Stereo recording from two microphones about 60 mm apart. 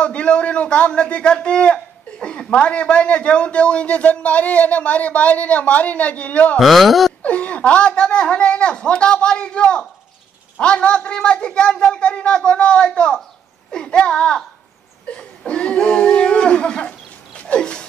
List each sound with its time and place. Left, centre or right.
0.0 s a man's voice: centre
6.6 s speech: centre
7.2 s a woman's voice: left
15.0 s a sound: centre